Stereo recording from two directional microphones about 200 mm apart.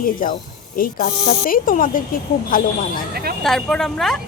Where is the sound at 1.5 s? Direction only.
45° left (ahead or behind).